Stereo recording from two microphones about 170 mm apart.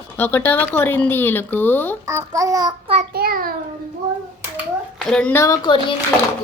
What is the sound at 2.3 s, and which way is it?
Speech, 20° right (ahead or behind).